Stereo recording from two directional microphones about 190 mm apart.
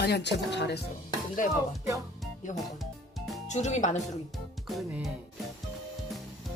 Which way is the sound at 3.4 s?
40° left (ahead or behind).